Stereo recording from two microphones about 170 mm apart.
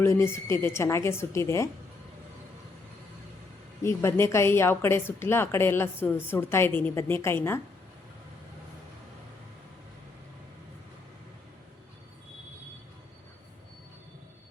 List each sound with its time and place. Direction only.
0.0 s a woman's voice: 15° left (ahead or behind)
3.8 s a woman's voice: 15° left (ahead or behind)